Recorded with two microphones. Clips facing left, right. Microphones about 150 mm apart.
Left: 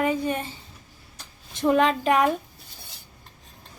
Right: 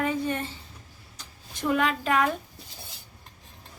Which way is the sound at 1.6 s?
25° left (ahead or behind).